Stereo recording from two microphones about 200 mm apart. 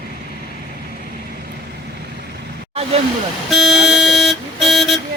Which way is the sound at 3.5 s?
Centre (ahead or behind).